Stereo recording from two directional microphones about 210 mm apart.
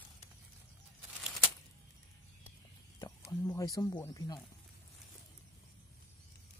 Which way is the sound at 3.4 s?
15° left (ahead or behind).